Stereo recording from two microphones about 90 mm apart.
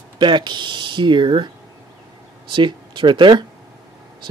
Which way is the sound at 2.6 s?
60° right (ahead or behind).